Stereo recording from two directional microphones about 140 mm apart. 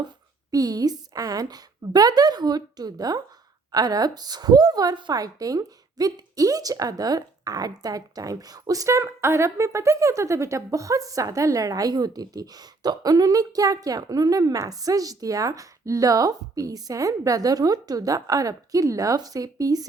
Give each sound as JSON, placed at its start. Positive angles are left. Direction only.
{"t": 0.5, "sound": "a woman's voice", "side_deg": -25}